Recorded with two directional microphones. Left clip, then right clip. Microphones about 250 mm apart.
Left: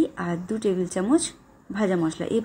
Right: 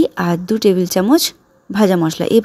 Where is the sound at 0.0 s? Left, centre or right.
Right.